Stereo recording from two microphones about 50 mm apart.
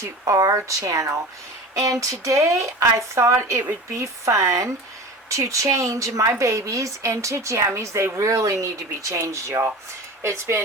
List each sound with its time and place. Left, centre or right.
0.0 s speech: right
3.9 s speech: right
8.2 s speech: right
10.2 s speech: right